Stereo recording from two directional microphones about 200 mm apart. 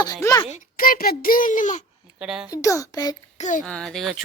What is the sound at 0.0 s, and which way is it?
Speech, 20° left (ahead or behind).